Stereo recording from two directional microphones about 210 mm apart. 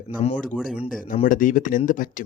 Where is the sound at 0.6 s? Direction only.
5° right (ahead or behind).